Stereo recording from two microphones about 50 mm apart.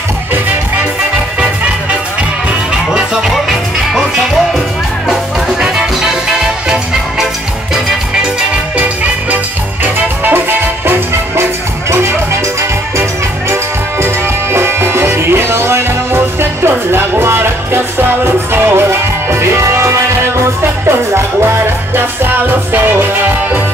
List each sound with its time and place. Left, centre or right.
2.9 s music: centre
5.6 s music: centre
11.9 s music: right
14.0 s music: right
21.1 s music: right